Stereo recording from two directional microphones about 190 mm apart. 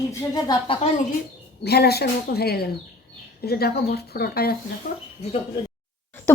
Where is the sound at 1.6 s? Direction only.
55° left (ahead or behind).